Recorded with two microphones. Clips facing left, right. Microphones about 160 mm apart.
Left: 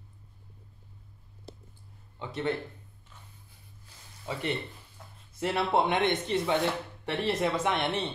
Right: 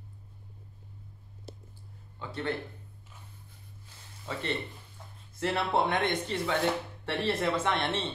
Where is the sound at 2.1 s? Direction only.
20° left (ahead or behind).